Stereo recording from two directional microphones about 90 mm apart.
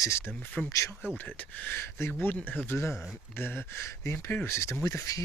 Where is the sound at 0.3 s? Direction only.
20° left (ahead or behind).